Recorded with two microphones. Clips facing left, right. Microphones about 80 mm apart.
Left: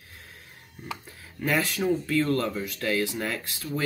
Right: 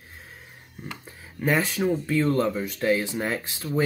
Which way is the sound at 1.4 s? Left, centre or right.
Centre.